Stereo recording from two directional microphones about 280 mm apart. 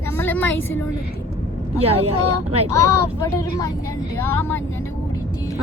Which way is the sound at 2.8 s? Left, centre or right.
Centre.